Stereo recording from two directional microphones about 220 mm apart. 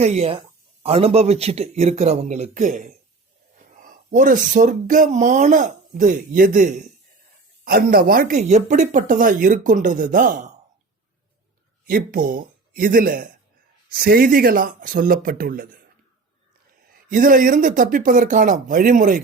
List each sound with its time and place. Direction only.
0.0 s a man's voice: 30° right (ahead or behind)
11.9 s speech: 40° right (ahead or behind)
16.9 s speech: 40° right (ahead or behind)